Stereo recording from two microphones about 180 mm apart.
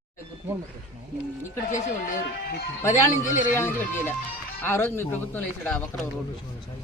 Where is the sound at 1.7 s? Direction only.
50° left (ahead or behind).